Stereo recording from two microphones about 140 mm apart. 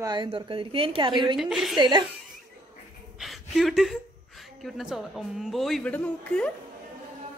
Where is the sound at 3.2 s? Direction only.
Centre (ahead or behind).